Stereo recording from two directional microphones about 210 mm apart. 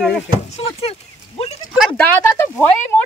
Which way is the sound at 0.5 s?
30° left (ahead or behind).